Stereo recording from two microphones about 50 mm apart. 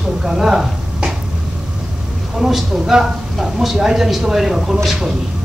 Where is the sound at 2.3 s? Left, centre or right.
Centre.